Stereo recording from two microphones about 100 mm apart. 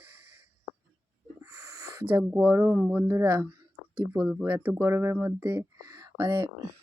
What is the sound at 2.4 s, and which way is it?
Speech, 25° right (ahead or behind).